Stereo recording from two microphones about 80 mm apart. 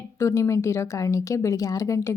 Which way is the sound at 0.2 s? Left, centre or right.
Left.